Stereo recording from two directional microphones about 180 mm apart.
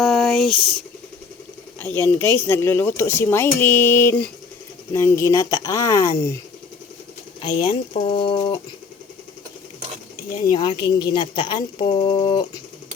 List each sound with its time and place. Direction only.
0.0 s a sound: centre (ahead or behind)
2.0 s speech: 10° left (ahead or behind)
7.4 s speech: 25° left (ahead or behind)
10.5 s a woman's voice: 25° left (ahead or behind)